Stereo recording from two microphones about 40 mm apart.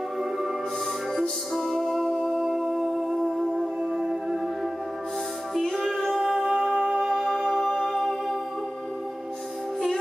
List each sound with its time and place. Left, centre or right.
1.5 s music: centre
5.5 s music: centre
6.0 s singing: centre
7.2 s music: centre